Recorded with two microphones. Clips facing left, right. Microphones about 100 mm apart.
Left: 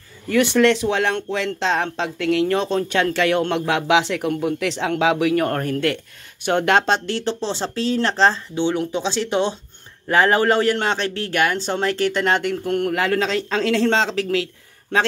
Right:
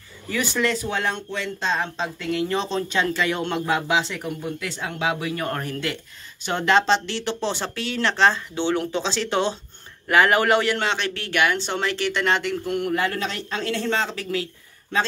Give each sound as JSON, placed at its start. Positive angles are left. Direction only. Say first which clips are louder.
{"t": 0.3, "sound": "speech", "louder": "left 8 dB", "side_deg": 65}
{"t": 7.4, "sound": "speech", "louder": "left 4 dB", "side_deg": 30}
{"t": 8.5, "sound": "speech", "louder": "left 2 dB", "side_deg": 10}
{"t": 10.0, "sound": "speech", "louder": "left 2 dB", "side_deg": 30}
{"t": 12.9, "sound": "speech", "louder": "left 5 dB", "side_deg": 90}